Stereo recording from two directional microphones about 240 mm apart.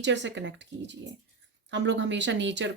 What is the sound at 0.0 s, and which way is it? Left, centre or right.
Speech, right.